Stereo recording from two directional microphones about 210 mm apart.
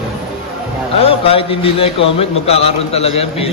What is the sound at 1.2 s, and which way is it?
A man's voice, 25° left (ahead or behind).